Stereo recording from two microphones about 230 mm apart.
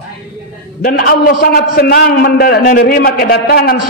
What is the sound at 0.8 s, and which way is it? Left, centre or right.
A man's voice, left.